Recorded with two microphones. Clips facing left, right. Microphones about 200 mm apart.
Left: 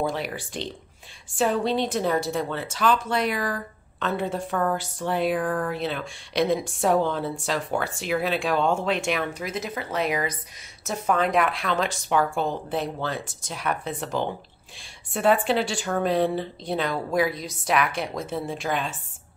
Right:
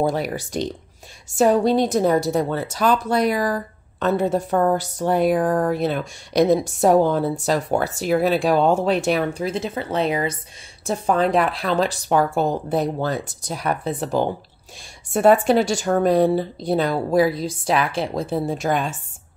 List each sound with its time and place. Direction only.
0.0 s a woman's voice: 40° right (ahead or behind)